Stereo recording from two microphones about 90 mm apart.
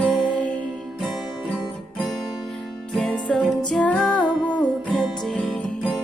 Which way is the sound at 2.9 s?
5° left (ahead or behind).